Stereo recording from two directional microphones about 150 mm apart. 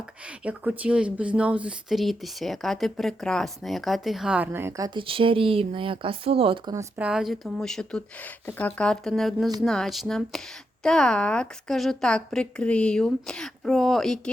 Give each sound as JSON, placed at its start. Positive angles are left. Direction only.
{"t": 0.3, "sound": "speech", "side_deg": -10}
{"t": 4.9, "sound": "speech", "side_deg": -35}
{"t": 6.9, "sound": "speech", "side_deg": -5}